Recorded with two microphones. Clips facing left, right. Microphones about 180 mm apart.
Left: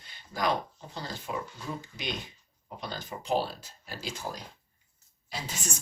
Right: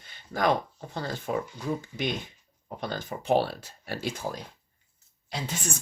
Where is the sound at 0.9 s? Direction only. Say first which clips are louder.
Right 6 dB; 55° right (ahead or behind).